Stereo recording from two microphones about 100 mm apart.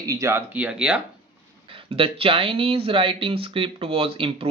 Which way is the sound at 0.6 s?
10° right (ahead or behind).